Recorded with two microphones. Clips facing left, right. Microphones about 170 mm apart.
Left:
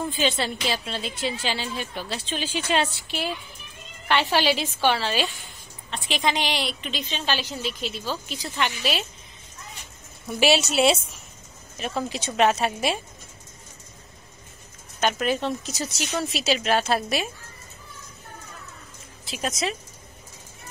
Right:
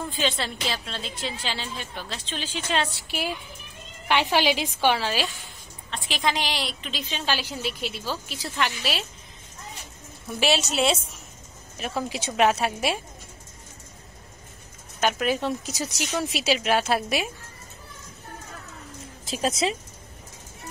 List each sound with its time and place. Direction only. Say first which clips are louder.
0.2 s a woman's voice: left 1 dB; 5° left (ahead or behind)
3.1 s a woman's voice: even; 10° right (ahead or behind)
10.4 s a woman's voice: left 3 dB; 5° left (ahead or behind)
15.0 s a woman's voice: even; 5° right (ahead or behind)
19.2 s speech: right 3 dB; 35° right (ahead or behind)